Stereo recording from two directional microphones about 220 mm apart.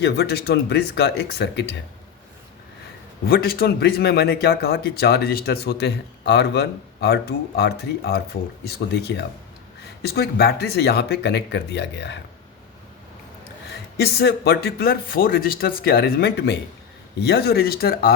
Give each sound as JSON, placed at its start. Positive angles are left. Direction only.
{"t": 0.0, "sound": "a man's voice", "side_deg": 50}
{"t": 3.2, "sound": "a man's voice", "side_deg": 45}
{"t": 13.9, "sound": "a man's voice", "side_deg": 45}